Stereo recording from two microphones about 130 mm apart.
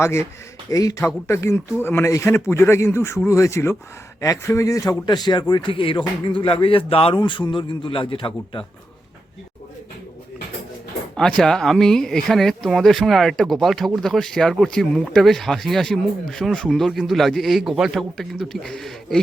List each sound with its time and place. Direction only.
0.0 s speech: 20° left (ahead or behind); by 8.6 s 40° left (ahead or behind)
11.2 s speech: 5° left (ahead or behind)